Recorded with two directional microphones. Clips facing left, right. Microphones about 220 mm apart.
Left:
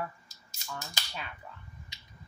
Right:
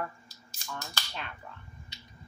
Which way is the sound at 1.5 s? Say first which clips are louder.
Right 1 dB; 5° left (ahead or behind).